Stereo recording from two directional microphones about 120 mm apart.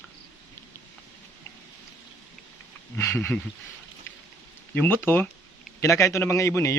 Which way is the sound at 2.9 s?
20° left (ahead or behind).